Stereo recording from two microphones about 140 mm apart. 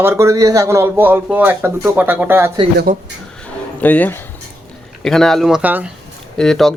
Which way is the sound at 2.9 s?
65° right (ahead or behind).